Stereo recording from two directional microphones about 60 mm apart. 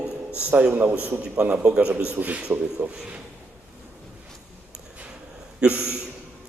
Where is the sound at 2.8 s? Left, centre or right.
Right.